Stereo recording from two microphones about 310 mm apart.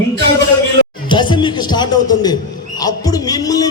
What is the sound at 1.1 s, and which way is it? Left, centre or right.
A man's voice, centre.